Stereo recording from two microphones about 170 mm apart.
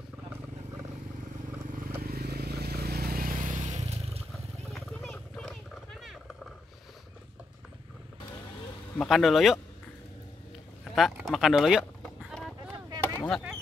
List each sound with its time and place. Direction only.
2.0 s vehicle: 65° right (ahead or behind); by 4.2 s 40° right (ahead or behind)
4.7 s wild animals: 5° left (ahead or behind)
8.9 s speech: centre (ahead or behind)
10.8 s duck: centre (ahead or behind)
13.0 s a sound: 10° left (ahead or behind)